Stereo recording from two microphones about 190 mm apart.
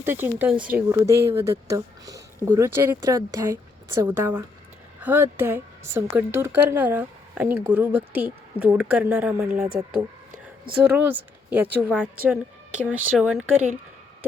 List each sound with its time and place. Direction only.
0.0 s a woman's voice: 10° right (ahead or behind)
10.8 s a woman's voice: 10° right (ahead or behind)